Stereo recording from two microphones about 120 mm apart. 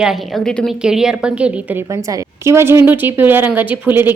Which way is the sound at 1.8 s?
25° right (ahead or behind).